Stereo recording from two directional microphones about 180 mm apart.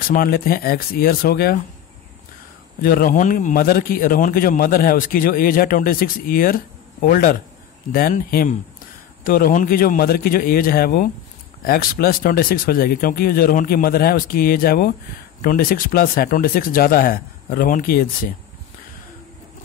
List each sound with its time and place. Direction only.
0.1 s speech: 55° left (ahead or behind)
2.8 s a man's voice: 55° left (ahead or behind)